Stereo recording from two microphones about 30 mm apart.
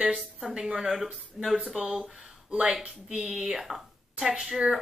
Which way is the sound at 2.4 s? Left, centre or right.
Right.